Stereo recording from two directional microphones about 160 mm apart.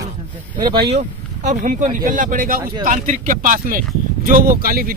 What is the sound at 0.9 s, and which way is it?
Speech, 50° right (ahead or behind).